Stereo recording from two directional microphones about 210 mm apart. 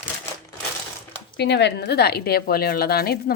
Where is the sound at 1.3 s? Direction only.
55° left (ahead or behind).